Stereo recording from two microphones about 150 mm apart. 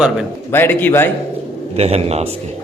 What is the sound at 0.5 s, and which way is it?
Speech, 15° left (ahead or behind).